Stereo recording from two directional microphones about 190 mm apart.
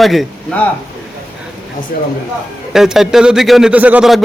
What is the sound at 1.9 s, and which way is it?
Speech, 55° left (ahead or behind).